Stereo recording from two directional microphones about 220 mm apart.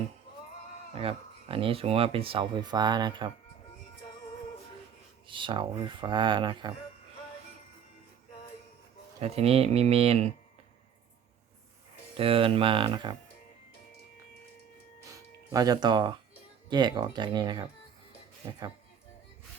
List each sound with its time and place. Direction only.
0.9 s speech: 25° right (ahead or behind)
5.3 s speech: 20° right (ahead or behind)
9.2 s speech: 25° right (ahead or behind)
12.1 s speech: 25° right (ahead or behind)
15.1 s music: 15° right (ahead or behind)
16.6 s speech: 20° right (ahead or behind)